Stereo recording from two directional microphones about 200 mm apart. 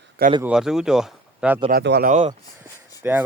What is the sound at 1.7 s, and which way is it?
Speech, 55° right (ahead or behind).